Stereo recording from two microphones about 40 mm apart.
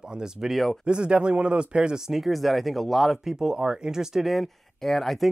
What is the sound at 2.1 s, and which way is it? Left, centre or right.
Speech, centre.